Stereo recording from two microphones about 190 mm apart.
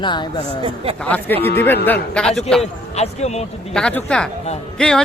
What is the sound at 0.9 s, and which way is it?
A man's voice, 10° left (ahead or behind).